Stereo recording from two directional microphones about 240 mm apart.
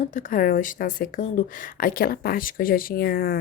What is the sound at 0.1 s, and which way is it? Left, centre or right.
Speech, left.